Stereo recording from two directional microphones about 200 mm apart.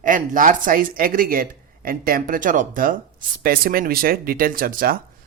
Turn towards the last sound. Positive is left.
turn(degrees=-45)  # may be behind; listen again after turning